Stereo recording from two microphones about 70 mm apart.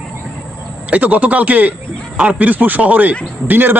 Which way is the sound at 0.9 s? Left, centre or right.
Right.